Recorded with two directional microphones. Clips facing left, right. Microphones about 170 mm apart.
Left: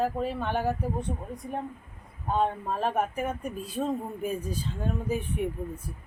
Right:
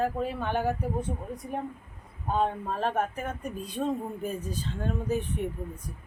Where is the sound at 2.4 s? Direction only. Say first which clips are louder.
Left 1 dB; 5° left (ahead or behind).